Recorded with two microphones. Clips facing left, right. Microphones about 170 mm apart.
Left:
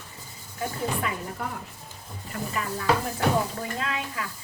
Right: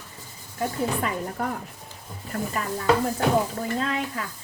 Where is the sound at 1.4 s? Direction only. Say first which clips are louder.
Right 5 dB; 45° right (ahead or behind).